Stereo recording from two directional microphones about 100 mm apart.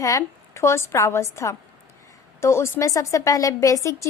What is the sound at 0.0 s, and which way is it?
A woman's voice, 30° left (ahead or behind).